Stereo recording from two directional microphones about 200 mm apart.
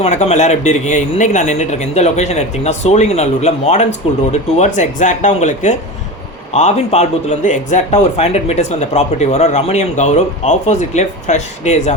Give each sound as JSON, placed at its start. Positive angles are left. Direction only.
{"t": 0.0, "sound": "speech", "side_deg": 35}